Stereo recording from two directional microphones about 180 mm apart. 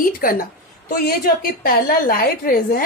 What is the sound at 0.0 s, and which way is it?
A woman's voice, 50° left (ahead or behind).